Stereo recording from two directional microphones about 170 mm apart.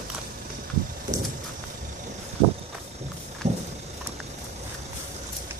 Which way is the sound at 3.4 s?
40° right (ahead or behind).